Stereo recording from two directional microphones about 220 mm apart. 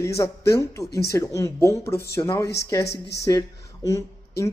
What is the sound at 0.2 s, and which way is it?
Speech, 15° left (ahead or behind).